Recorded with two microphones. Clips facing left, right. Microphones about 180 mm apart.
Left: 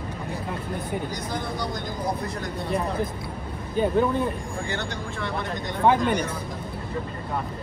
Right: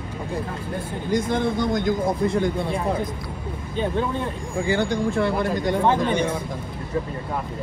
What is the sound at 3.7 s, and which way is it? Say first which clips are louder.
Speech: left 3 dB; 5° left (ahead or behind).